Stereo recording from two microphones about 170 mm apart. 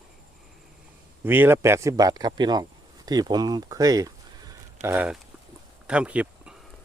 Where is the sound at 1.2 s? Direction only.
10° right (ahead or behind).